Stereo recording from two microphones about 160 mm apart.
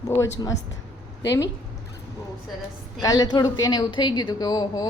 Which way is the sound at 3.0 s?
25° left (ahead or behind).